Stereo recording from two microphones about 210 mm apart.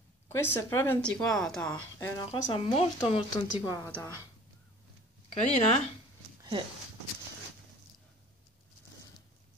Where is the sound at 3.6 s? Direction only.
15° left (ahead or behind).